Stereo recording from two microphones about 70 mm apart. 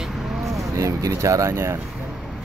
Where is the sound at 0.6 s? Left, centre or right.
Right.